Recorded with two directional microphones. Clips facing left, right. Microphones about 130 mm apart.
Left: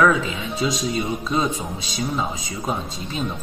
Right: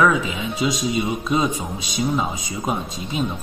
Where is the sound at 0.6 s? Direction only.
Centre (ahead or behind).